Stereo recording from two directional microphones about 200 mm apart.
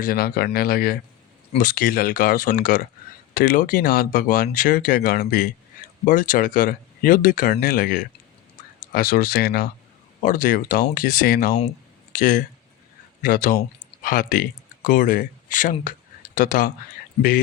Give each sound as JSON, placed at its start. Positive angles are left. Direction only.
{"t": 0.0, "sound": "speech", "side_deg": 50}